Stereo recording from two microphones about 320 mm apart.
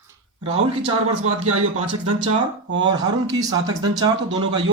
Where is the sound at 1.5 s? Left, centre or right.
Right.